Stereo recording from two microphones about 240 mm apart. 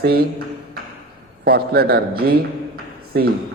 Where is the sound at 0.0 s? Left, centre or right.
Right.